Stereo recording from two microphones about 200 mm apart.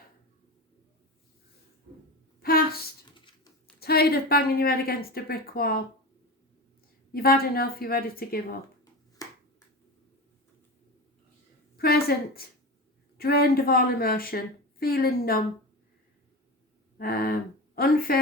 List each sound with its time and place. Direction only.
2.4 s a sound: 50° left (ahead or behind)
3.8 s a woman's voice: 50° left (ahead or behind)
7.1 s a woman's voice: 50° left (ahead or behind)
9.2 s finger snapping: 20° left (ahead or behind)
11.8 s a woman's voice: 50° left (ahead or behind)
17.0 s speech: 50° left (ahead or behind)